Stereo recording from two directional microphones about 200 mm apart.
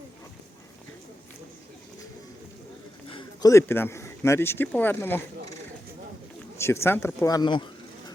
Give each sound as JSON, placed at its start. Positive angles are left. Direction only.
{"t": 3.1, "sound": "speech", "side_deg": 20}
{"t": 6.6, "sound": "speech", "side_deg": 10}